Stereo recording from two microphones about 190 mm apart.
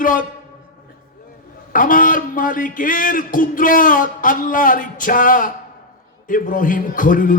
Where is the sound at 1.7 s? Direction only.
45° left (ahead or behind).